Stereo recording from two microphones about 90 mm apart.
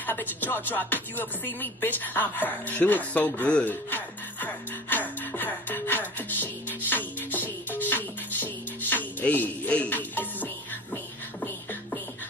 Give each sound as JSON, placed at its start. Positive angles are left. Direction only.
{"t": 0.0, "sound": "speech", "side_deg": 20}
{"t": 3.9, "sound": "music", "side_deg": 20}